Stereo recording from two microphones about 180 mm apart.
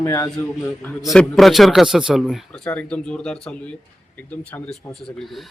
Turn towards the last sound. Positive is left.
turn(degrees=0)  # may be behind; listen again after turning